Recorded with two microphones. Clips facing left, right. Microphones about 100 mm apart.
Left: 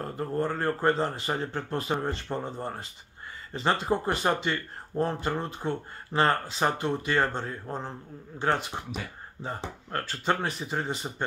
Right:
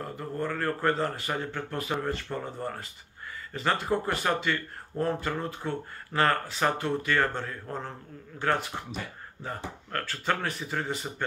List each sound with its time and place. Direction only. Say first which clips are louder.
0.0 s speech: left 3 dB; 30° left (ahead or behind)